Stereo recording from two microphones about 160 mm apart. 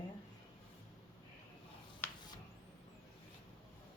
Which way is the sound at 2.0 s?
15° left (ahead or behind).